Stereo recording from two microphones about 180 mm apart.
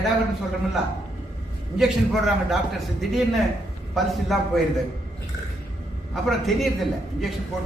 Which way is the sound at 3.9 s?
Centre (ahead or behind).